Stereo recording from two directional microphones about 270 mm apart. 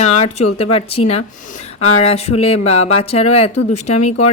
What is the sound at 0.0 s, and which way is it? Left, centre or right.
A child's voice, left.